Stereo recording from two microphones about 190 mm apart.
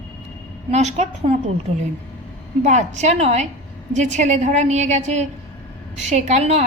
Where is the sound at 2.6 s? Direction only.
40° right (ahead or behind).